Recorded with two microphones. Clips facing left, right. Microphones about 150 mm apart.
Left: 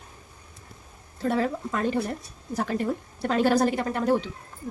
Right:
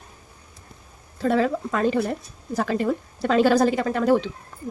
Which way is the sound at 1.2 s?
90° right.